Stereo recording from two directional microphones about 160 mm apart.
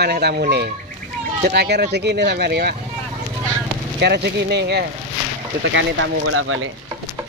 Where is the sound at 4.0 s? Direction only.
90° right.